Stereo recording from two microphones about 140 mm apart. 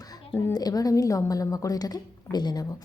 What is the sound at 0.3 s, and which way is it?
A woman's voice, 25° left (ahead or behind).